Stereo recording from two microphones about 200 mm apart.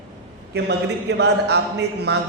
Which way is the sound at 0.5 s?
55° right (ahead or behind).